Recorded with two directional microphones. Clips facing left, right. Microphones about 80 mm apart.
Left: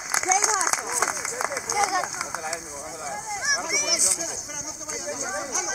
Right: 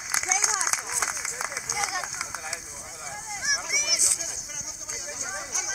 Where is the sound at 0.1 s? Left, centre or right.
Left.